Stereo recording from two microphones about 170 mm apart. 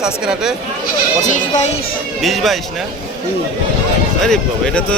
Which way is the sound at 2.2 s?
Centre (ahead or behind).